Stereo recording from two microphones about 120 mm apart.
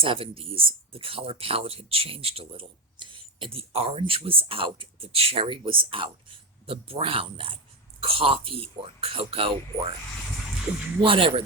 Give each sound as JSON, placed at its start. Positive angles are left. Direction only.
{"t": 0.0, "sound": "speech", "side_deg": -50}
{"t": 11.0, "sound": "speech", "side_deg": -50}